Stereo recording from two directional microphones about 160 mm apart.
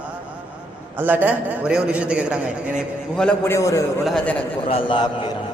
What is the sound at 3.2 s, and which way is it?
Speech, 10° left (ahead or behind).